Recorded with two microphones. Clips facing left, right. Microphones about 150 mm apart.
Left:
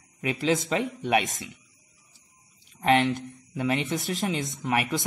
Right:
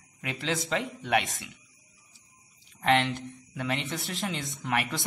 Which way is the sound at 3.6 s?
15° left (ahead or behind).